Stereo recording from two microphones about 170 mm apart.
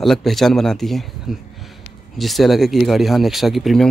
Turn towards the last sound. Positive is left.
turn(degrees=0)  # may be behind; listen again after turning